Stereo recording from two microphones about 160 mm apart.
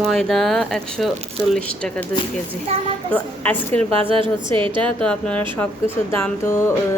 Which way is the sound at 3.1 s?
10° left (ahead or behind).